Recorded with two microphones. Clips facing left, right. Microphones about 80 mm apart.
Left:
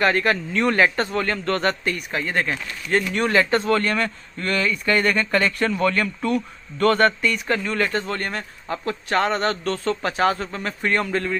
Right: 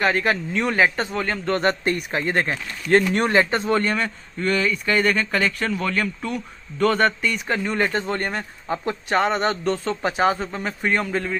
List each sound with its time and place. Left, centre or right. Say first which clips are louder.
0.0 s speech: left 1 dB; centre